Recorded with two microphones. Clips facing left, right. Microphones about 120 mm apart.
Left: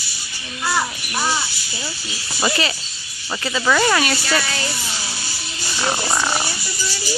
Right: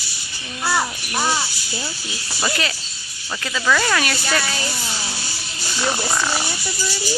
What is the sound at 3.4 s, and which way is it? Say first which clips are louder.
Speech: left 2 dB; 15° left (ahead or behind).